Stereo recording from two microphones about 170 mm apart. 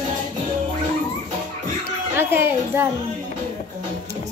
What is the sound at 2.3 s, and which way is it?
Music, 10° right (ahead or behind).